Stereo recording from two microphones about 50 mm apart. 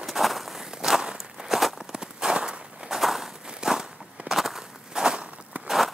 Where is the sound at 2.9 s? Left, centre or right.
Centre.